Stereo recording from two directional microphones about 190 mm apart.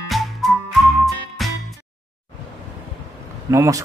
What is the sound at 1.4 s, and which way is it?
Music, centre (ahead or behind).